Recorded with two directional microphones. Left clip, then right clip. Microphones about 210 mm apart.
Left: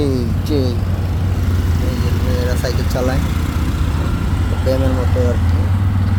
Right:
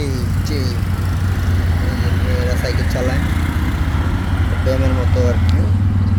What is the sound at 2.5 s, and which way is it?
Speech, 15° left (ahead or behind).